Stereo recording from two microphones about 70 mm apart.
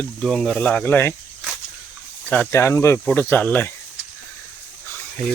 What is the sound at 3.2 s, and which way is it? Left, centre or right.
Speech, left.